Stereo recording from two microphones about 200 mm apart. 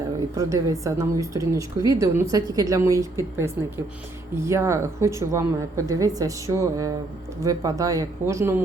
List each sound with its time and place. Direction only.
0.3 s a woman's voice: 15° right (ahead or behind)